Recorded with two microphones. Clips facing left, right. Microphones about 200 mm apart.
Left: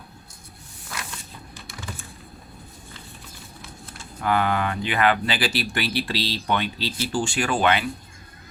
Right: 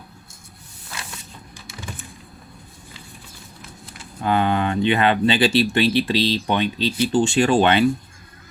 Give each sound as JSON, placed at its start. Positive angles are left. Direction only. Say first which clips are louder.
{"t": 4.2, "sound": "speech", "louder": "right 3 dB", "side_deg": -25}